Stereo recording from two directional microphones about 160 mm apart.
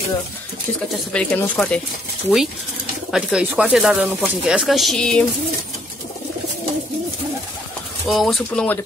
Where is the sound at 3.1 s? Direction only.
5° right (ahead or behind).